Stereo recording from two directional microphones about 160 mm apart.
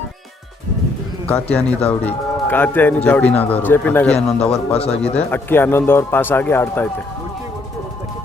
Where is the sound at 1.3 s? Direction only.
10° left (ahead or behind).